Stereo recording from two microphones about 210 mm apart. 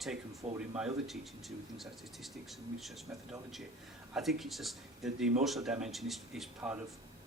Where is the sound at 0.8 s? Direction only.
Centre (ahead or behind).